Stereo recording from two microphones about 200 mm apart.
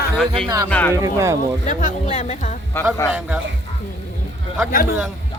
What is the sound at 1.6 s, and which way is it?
Speech, 40° left (ahead or behind).